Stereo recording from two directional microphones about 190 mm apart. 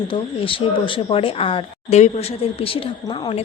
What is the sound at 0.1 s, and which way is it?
Speech, 25° left (ahead or behind).